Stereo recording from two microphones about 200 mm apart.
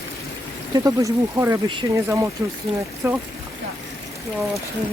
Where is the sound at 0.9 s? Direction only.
15° right (ahead or behind).